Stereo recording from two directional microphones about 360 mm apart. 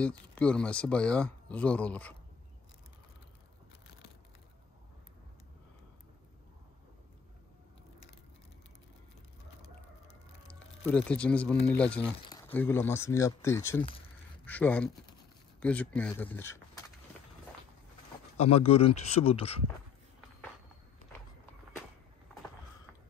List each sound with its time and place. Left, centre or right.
0.4 s speech: centre
10.5 s speech: centre
18.4 s speech: centre